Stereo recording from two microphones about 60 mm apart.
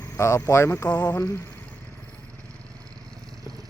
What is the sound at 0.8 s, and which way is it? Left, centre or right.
Speech, left.